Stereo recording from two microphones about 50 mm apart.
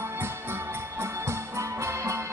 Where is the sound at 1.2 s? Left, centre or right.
Right.